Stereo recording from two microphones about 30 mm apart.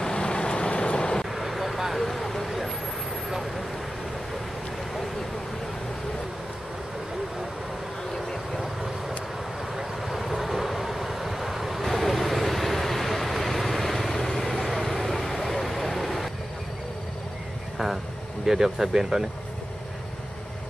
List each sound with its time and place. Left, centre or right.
0.0 s vehicle: left
1.3 s vehicle: centre
9.8 s vehicle: centre
18.4 s speech: centre